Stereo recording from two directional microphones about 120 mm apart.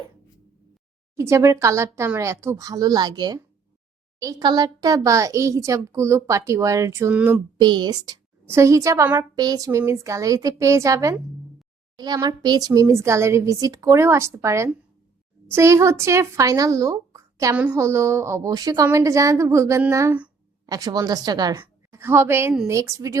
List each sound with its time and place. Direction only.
1.1 s a child's voice: 25° right (ahead or behind)
7.1 s a sound: 10° right (ahead or behind)
7.6 s a woman's voice: 40° right (ahead or behind)
8.4 s a child's voice: 25° right (ahead or behind)
21.5 s a woman's voice: 20° right (ahead or behind)